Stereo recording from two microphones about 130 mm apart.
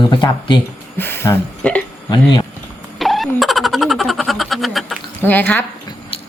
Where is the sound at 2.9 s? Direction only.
Centre (ahead or behind).